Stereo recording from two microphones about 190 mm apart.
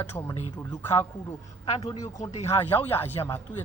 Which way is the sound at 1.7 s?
30° left (ahead or behind).